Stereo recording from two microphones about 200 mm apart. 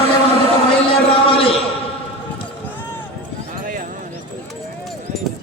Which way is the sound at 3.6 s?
45° right (ahead or behind).